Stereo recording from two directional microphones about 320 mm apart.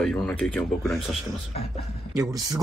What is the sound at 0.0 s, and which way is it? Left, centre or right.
Speech, centre.